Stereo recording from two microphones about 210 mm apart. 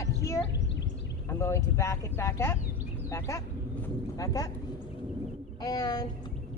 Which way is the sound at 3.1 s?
15° left (ahead or behind).